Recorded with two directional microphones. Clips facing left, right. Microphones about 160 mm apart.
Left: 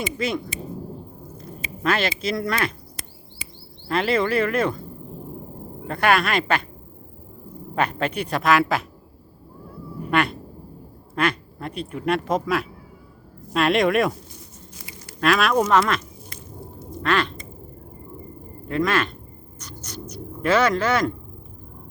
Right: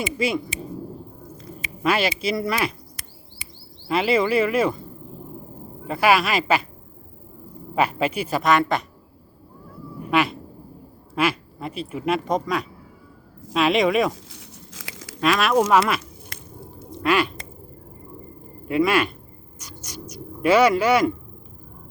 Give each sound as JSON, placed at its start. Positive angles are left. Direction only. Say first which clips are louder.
{"t": 0.0, "sound": "speech", "louder": "right 2 dB", "side_deg": -5}
{"t": 1.8, "sound": "speech", "louder": "right 1 dB", "side_deg": -5}
{"t": 3.8, "sound": "speech", "louder": "right 1 dB", "side_deg": -5}
{"t": 5.9, "sound": "speech", "louder": "right 1 dB", "side_deg": -5}
{"t": 7.8, "sound": "speech", "louder": "right 2 dB", "side_deg": -5}
{"t": 10.1, "sound": "speech", "louder": "right 1 dB", "side_deg": 0}
{"t": 14.3, "sound": "biting", "louder": "right 1 dB", "side_deg": -90}
{"t": 15.2, "sound": "speech", "louder": "even", "side_deg": 0}
{"t": 16.3, "sound": "squish", "louder": "even", "side_deg": -90}
{"t": 17.0, "sound": "quack", "louder": "right 2 dB", "side_deg": -10}
{"t": 18.7, "sound": "speech", "louder": "right 3 dB", "side_deg": -10}
{"t": 19.5, "sound": "a sound", "louder": "left 1 dB", "side_deg": -10}